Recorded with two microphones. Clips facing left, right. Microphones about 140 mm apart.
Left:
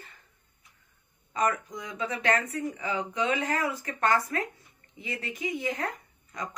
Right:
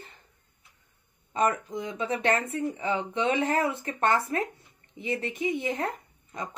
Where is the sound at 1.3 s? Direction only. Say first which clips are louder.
Right 2 dB; 30° right (ahead or behind).